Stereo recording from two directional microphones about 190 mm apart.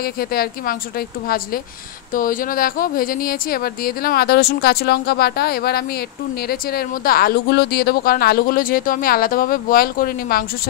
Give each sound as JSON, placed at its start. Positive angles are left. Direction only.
{"t": 0.0, "sound": "speech", "side_deg": 50}